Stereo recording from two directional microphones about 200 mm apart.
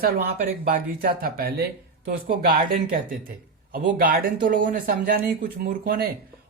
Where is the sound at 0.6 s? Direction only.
45° right (ahead or behind).